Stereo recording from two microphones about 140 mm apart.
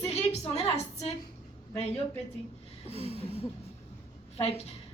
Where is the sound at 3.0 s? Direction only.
45° left (ahead or behind).